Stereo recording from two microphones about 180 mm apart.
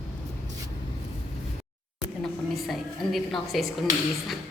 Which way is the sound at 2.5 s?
Centre (ahead or behind).